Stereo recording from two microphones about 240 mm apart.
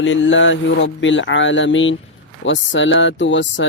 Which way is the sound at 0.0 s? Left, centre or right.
Left.